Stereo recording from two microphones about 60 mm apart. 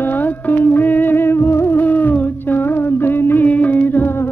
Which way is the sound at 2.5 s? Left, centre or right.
Left.